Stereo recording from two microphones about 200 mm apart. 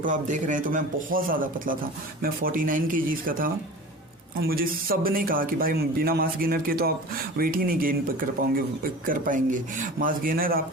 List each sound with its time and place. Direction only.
0.0 s speech: 40° right (ahead or behind)
9.0 s speech: 40° right (ahead or behind)